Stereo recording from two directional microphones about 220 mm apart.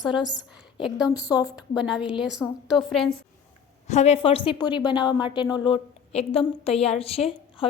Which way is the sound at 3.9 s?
30° left (ahead or behind).